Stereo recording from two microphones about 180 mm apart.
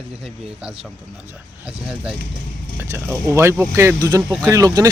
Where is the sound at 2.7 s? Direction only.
15° right (ahead or behind).